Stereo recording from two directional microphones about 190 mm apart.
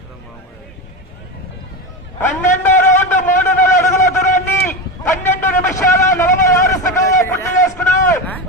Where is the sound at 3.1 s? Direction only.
40° left (ahead or behind).